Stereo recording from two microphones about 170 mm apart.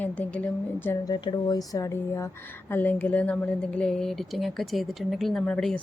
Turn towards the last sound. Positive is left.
turn(degrees=5)  # may be behind; listen again after turning